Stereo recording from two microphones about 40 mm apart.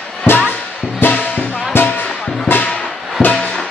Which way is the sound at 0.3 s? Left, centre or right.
Left.